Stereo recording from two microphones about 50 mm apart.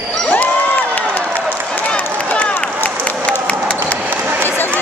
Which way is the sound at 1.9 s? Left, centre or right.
Left.